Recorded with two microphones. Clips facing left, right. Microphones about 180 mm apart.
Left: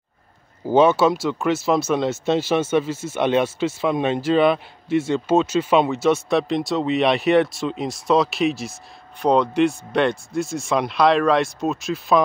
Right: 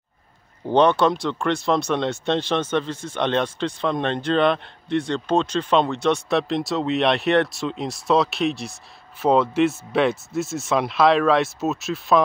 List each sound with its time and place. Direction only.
0.7 s speech: 5° left (ahead or behind)